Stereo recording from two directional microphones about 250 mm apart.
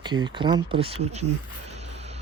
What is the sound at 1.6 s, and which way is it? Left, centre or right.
Music, right.